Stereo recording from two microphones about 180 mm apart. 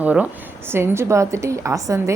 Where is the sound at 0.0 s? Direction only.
10° right (ahead or behind).